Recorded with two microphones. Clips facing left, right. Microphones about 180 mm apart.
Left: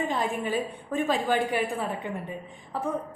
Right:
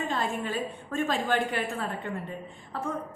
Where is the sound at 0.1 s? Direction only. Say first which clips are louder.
Left 2 dB; 15° left (ahead or behind).